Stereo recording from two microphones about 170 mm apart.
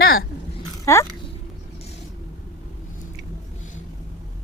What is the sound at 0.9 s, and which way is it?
Speech, 15° left (ahead or behind).